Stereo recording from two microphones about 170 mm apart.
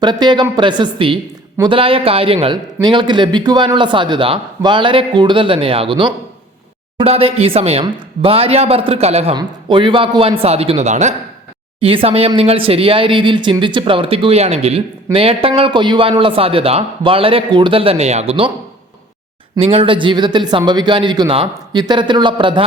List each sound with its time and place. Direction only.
0.0 s a man's voice: 25° right (ahead or behind); by 11.1 s 45° right (ahead or behind)
11.8 s speech: 30° right (ahead or behind)
19.5 s a man's voice: 35° right (ahead or behind)